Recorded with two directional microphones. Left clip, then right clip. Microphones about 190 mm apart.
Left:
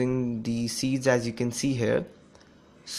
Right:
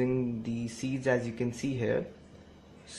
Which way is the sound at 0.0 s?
20° left (ahead or behind).